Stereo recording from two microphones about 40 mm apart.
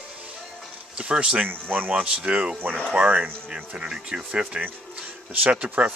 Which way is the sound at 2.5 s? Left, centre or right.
Right.